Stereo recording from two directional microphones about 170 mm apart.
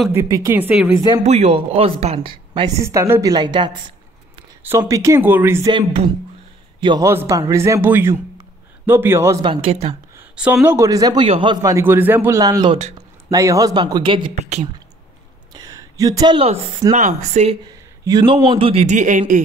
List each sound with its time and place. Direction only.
0.1 s speech: 15° right (ahead or behind)
0.9 s a man's voice: 25° right (ahead or behind)
1.2 s a man's voice: 40° right (ahead or behind)
2.8 s a man's voice: 15° right (ahead or behind)
5.7 s a man's voice: 30° right (ahead or behind)
7.1 s speech: 15° right (ahead or behind)
9.4 s a man's voice: 30° right (ahead or behind)
10.3 s a man's voice: 10° right (ahead or behind); by 14.2 s 25° right (ahead or behind)
14.3 s a man's voice: 40° right (ahead or behind)
15.5 s a sound: 20° right (ahead or behind)
16.9 s speech: 45° right (ahead or behind)
17.6 s a man's voice: 25° right (ahead or behind); by 19.4 s 50° right (ahead or behind)